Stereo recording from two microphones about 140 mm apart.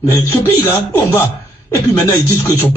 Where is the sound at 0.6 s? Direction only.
15° left (ahead or behind).